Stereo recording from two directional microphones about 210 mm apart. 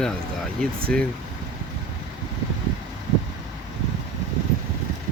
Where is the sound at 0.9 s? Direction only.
5° left (ahead or behind).